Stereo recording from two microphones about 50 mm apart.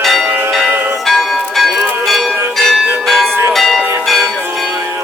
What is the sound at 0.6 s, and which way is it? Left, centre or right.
Change ringing, right.